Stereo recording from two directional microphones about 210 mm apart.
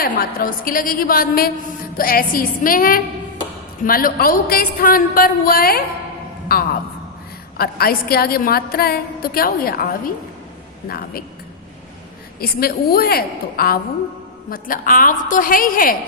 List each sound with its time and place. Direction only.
0.0 s a woman's voice: 45° left (ahead or behind)
12.4 s a woman's voice: 45° left (ahead or behind)